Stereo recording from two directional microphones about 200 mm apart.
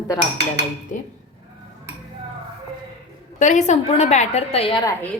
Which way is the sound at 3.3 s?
35° left (ahead or behind).